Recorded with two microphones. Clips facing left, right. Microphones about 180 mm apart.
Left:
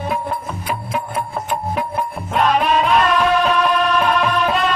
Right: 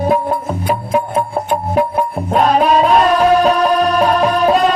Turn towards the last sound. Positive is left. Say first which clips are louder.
# right 6 dB
turn(degrees=-40)  # may be behind; listen again after turning